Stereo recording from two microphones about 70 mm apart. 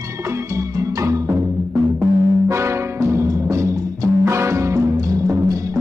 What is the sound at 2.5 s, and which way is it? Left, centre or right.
Music, right.